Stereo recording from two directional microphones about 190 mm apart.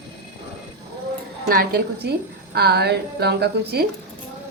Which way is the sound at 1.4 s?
55° right (ahead or behind).